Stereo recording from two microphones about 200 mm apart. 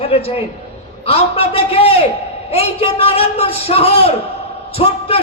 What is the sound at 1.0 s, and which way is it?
A man's voice, 30° left (ahead or behind).